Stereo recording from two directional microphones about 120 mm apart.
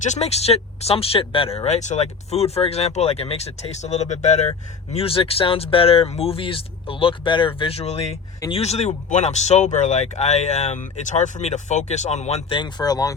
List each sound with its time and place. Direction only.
0.0 s speech: 70° left (ahead or behind)
4.9 s speech: 55° left (ahead or behind); by 12.4 s 70° left (ahead or behind)
12.5 s speech: 40° left (ahead or behind)